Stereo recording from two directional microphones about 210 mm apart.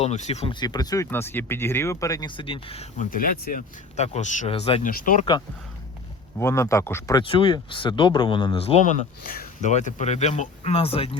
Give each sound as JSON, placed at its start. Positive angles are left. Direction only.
{"t": 0.0, "sound": "speech", "side_deg": 30}
{"t": 3.1, "sound": "speech", "side_deg": 45}
{"t": 4.8, "sound": "speech", "side_deg": 40}
{"t": 6.4, "sound": "speech", "side_deg": 15}
{"t": 7.2, "sound": "speech", "side_deg": 25}
{"t": 9.2, "sound": "speech", "side_deg": 40}